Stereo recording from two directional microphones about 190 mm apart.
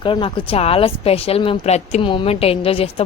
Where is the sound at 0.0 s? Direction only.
25° left (ahead or behind).